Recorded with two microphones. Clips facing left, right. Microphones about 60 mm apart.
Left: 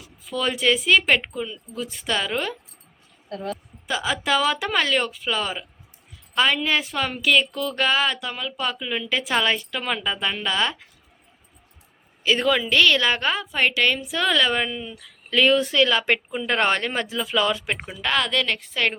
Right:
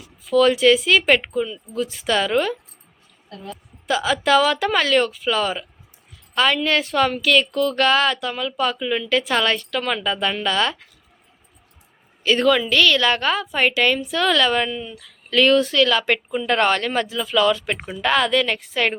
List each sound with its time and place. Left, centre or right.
0.3 s speech: centre
3.8 s a woman's voice: centre
12.2 s a woman's voice: centre
12.8 s speech: left
13.1 s a woman's voice: centre
17.7 s speech: centre